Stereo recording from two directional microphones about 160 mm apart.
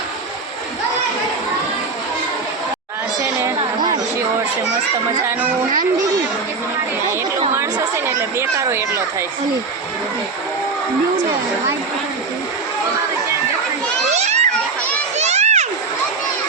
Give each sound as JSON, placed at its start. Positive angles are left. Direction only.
{"t": 3.2, "sound": "chatter", "side_deg": -20}
{"t": 7.5, "sound": "speech", "side_deg": -15}
{"t": 14.1, "sound": "children playing", "side_deg": -45}